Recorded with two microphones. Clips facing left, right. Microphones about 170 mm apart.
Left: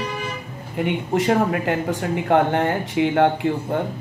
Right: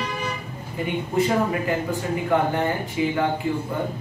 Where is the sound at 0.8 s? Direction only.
80° left.